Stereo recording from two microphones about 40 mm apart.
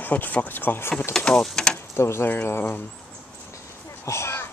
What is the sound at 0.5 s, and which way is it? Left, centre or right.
Speech, left.